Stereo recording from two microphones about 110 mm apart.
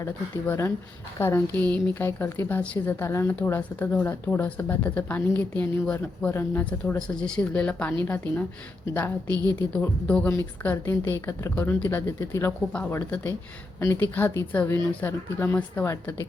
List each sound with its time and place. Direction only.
0.4 s a woman's voice: 20° left (ahead or behind)
9.3 s a woman's voice: 35° right (ahead or behind)
9.6 s a woman's voice: 15° left (ahead or behind)